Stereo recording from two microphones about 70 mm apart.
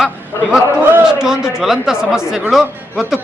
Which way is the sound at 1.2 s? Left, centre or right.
Centre.